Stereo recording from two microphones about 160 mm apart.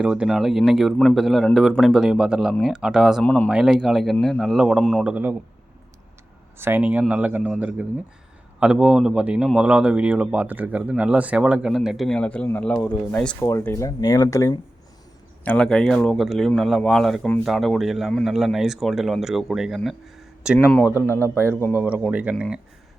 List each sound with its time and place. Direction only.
0.0 s speech: 5° right (ahead or behind)
3.2 s speech: 10° left (ahead or behind)
3.5 s speech: 5° right (ahead or behind)
5.1 s speech: 10° right (ahead or behind)
6.6 s speech: 10° right (ahead or behind); by 13.3 s 5° left (ahead or behind)
13.4 s speech: 20° left (ahead or behind)
15.4 s speech: 5° left (ahead or behind)
21.1 s speech: 15° left (ahead or behind)
21.8 s speech: 10° right (ahead or behind)